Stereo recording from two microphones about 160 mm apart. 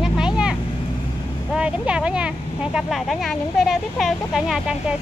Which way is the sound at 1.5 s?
5° right (ahead or behind).